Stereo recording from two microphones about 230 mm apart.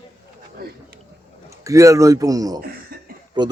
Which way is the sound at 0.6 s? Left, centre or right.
Right.